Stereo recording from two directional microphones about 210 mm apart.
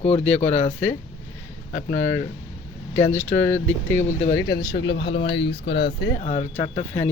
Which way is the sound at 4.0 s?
35° left (ahead or behind).